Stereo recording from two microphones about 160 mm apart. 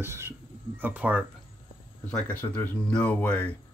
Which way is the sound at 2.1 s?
10° left (ahead or behind).